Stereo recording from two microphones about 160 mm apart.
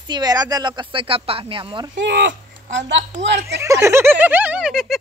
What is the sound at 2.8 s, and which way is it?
Speech, 90° right.